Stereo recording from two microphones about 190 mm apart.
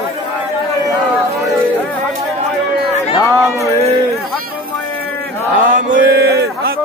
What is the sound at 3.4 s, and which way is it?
Music, 15° right (ahead or behind).